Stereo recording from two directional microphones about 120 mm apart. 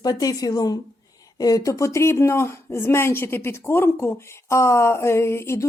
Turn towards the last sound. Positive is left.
turn(degrees=20)  # may be behind; listen again after turning